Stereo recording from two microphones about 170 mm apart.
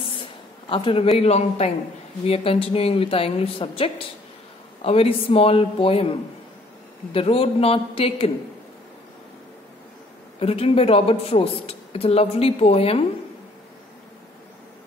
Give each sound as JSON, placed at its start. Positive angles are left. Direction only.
{"t": 0.2, "sound": "a woman's voice", "side_deg": 30}
{"t": 7.2, "sound": "a woman's voice", "side_deg": 35}
{"t": 10.4, "sound": "a woman's voice", "side_deg": 35}